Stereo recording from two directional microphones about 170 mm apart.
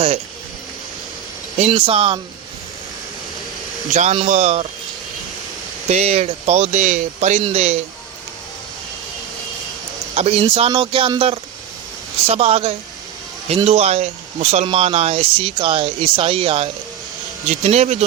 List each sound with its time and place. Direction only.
1.5 s speech: 35° right (ahead or behind)
3.9 s speech: 40° right (ahead or behind)
5.9 s speech: 40° right (ahead or behind)
10.2 s speech: 35° right (ahead or behind)